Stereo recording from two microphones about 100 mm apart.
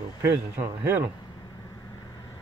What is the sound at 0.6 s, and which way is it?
Speech, 20° right (ahead or behind).